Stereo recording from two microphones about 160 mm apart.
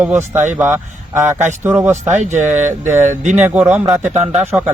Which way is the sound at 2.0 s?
45° right (ahead or behind).